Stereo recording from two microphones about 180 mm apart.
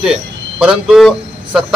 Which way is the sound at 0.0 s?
5° right (ahead or behind).